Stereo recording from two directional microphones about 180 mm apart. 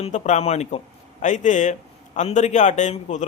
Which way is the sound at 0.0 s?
40° left (ahead or behind).